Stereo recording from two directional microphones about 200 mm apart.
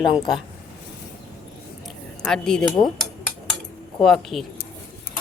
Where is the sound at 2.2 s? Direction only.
5° left (ahead or behind).